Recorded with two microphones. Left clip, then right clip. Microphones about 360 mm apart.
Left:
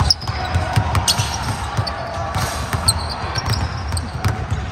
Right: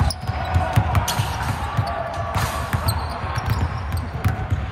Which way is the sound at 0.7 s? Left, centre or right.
Left.